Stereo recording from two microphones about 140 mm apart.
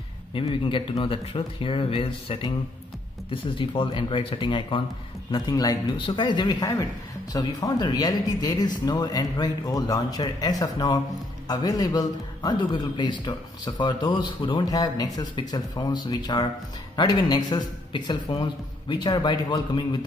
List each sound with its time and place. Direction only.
0.3 s a man's voice: 40° left (ahead or behind)